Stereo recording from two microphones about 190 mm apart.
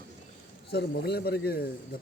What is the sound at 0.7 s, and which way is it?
Speech, 60° left (ahead or behind).